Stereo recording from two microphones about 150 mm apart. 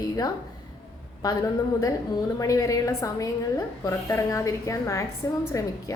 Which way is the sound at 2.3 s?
25° left (ahead or behind).